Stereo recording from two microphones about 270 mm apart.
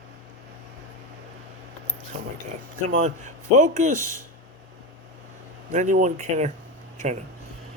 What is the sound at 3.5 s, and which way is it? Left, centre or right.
Speech, right.